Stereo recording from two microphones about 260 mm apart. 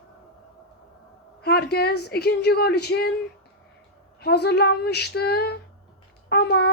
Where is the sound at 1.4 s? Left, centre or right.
Left.